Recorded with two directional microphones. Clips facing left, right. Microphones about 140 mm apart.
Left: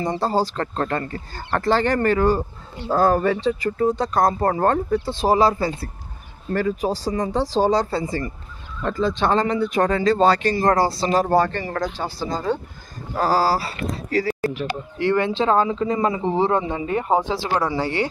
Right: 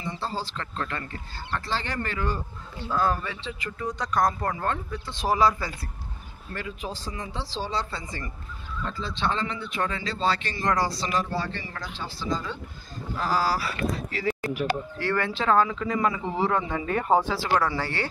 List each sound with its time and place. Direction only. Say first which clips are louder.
0.0 s speech: left 11 dB; 40° left (ahead or behind)
1.5 s speech: left 11 dB; 50° left (ahead or behind); by 5.9 s 30° left (ahead or behind)
6.5 s speech: left 13 dB; 40° left (ahead or behind)
8.8 s speech: left 9 dB; 50° left (ahead or behind); by 11.2 s 30° left (ahead or behind)
11.2 s speech: left 12 dB; 50° left (ahead or behind)
15.0 s speech: left 12 dB; 20° left (ahead or behind)